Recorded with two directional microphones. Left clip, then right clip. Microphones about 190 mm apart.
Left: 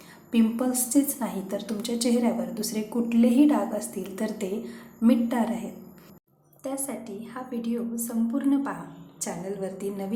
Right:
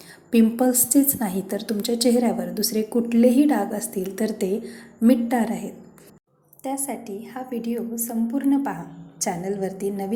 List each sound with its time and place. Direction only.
0.3 s a woman's voice: 25° right (ahead or behind)
6.8 s a woman's voice: 15° right (ahead or behind)